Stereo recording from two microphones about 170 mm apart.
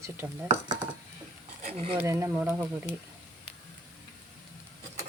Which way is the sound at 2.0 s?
15° right (ahead or behind).